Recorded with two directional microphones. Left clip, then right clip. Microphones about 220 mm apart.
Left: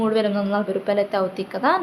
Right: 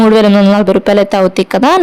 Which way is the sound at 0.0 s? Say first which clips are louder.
Right 14 dB; 50° right (ahead or behind).